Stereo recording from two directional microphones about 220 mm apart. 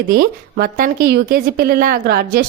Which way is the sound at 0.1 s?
45° right (ahead or behind).